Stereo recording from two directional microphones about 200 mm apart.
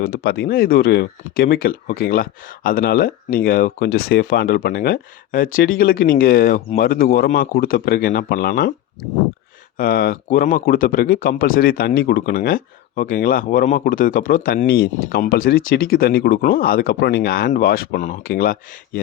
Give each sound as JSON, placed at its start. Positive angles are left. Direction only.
{"t": 0.0, "sound": "speech", "side_deg": 50}
{"t": 9.7, "sound": "speech", "side_deg": 45}